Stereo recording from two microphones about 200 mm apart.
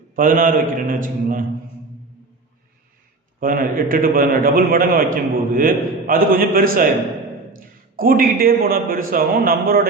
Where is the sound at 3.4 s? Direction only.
45° right (ahead or behind).